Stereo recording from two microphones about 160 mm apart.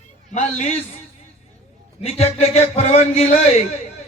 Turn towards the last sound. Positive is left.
turn(degrees=40)  # may be behind; listen again after turning